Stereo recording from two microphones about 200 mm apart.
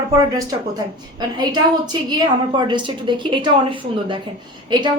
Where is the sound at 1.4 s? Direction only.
20° right (ahead or behind).